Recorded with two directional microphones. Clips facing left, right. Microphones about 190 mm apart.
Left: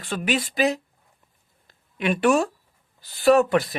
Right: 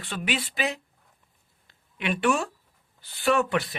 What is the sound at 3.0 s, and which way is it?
Speech, 40° left (ahead or behind).